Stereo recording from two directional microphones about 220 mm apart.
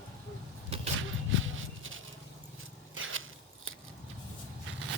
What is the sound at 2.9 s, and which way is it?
Biting, 65° right (ahead or behind).